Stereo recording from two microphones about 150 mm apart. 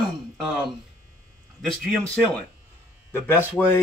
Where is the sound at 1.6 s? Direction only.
Centre (ahead or behind).